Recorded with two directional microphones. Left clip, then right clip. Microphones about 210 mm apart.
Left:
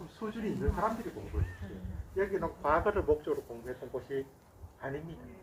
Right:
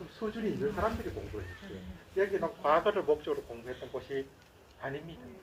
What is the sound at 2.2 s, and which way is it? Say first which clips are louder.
Speech: right 2 dB; 50° left (ahead or behind).